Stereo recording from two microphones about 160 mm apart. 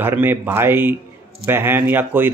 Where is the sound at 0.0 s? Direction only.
15° right (ahead or behind).